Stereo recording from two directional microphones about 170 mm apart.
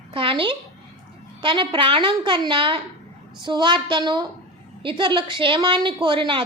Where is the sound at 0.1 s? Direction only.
30° right (ahead or behind).